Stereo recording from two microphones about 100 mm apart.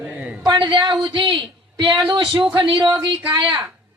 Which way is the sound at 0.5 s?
55° right (ahead or behind).